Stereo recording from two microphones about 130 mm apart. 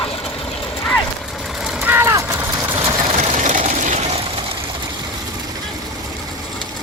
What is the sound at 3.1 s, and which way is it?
Sewing machine, 70° right (ahead or behind).